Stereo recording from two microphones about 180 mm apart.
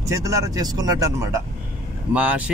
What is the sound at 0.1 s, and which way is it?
Speech, 20° right (ahead or behind).